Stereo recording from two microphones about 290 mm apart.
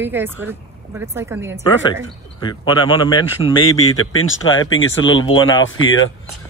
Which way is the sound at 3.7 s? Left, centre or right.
Left.